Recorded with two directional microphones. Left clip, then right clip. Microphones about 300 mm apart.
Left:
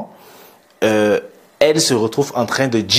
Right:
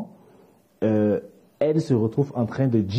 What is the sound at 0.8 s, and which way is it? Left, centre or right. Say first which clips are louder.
Speech: left 8 dB; centre.